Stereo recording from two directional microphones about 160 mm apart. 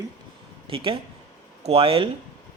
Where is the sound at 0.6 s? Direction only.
35° right (ahead or behind).